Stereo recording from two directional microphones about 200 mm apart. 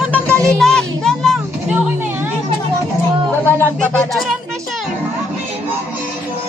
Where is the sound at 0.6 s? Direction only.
Centre (ahead or behind).